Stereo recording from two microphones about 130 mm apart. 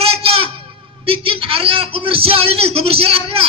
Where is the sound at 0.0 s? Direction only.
45° right (ahead or behind).